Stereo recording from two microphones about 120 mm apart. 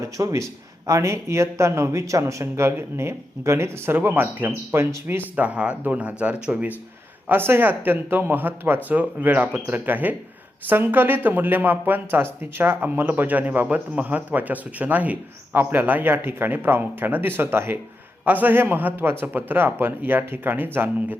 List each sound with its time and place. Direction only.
0.0 s speech: 25° right (ahead or behind)